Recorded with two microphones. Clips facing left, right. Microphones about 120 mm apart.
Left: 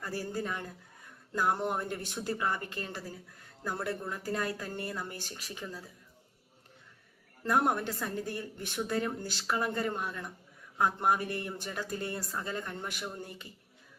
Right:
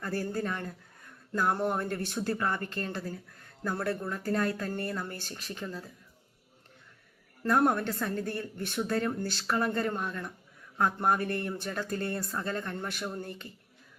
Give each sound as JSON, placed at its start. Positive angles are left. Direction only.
{"t": 0.0, "sound": "a woman's voice", "side_deg": 15}
{"t": 7.4, "sound": "a woman's voice", "side_deg": 15}